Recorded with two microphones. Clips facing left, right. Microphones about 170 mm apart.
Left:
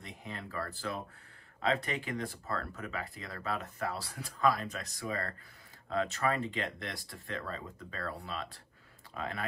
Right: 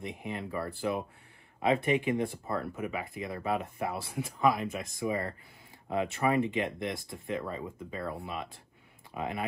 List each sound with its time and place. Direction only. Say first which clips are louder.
0.0 s speech: right 7 dB; 20° right (ahead or behind)